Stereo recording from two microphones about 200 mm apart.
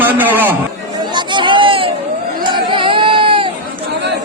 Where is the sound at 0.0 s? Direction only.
10° right (ahead or behind).